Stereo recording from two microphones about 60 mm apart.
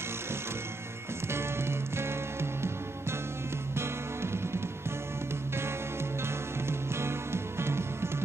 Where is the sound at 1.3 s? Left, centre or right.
Right.